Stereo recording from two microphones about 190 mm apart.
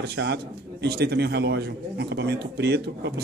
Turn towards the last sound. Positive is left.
turn(degrees=-60)  # may be behind; listen again after turning